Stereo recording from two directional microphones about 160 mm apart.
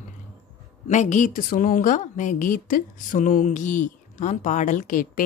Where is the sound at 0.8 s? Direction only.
50° left (ahead or behind).